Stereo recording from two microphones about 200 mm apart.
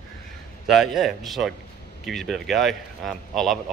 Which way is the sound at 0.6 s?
Centre (ahead or behind).